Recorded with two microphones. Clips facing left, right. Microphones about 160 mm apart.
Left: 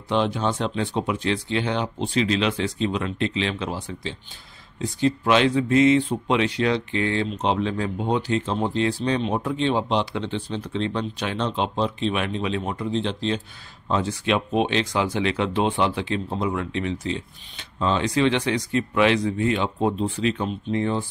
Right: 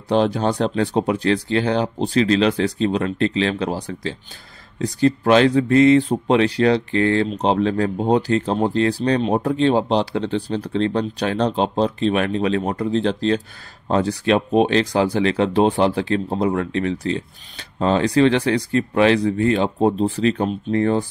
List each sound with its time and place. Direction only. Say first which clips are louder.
0.1 s speech: right 5 dB; 40° right (ahead or behind)
13.8 s speech: right 5 dB; 40° right (ahead or behind)